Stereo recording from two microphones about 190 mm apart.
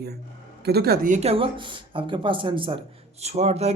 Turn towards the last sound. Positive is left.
turn(degrees=-35)  # may be behind; listen again after turning